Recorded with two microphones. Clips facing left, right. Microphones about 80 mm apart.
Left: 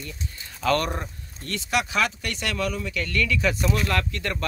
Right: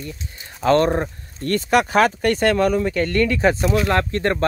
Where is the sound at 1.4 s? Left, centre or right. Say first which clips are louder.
Right 9 dB; right.